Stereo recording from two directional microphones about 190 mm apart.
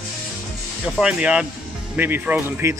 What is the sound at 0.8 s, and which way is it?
Speech, 5° right (ahead or behind).